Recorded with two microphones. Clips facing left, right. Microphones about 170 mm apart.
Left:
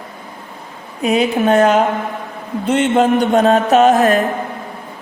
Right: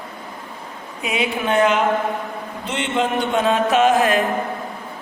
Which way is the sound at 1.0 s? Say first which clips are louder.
Left 8 dB; 40° left (ahead or behind).